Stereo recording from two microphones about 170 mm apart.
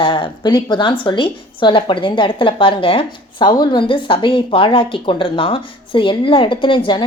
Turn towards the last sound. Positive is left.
turn(degrees=30)  # may be behind; listen again after turning